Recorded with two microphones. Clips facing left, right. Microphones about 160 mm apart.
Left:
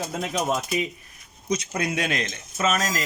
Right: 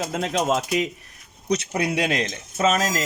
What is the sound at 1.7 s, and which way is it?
Speech, 30° right (ahead or behind).